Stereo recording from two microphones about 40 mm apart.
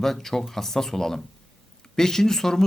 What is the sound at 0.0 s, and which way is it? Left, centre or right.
Speech, centre.